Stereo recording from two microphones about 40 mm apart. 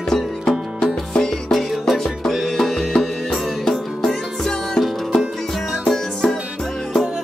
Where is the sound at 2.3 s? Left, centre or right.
Centre.